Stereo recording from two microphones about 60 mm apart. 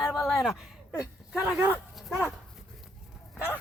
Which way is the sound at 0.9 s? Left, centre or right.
Left.